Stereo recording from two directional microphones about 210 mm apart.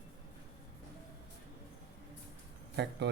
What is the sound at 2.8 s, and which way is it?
Speech, 55° right (ahead or behind).